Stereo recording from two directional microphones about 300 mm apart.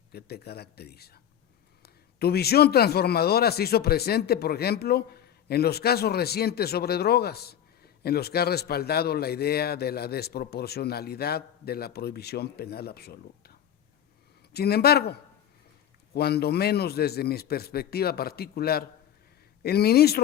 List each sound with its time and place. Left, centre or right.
0.1 s a man's voice: left